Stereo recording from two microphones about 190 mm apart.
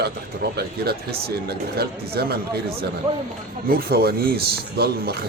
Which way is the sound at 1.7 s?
55° right (ahead or behind).